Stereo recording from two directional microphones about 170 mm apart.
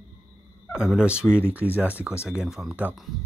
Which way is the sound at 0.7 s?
5° right (ahead or behind).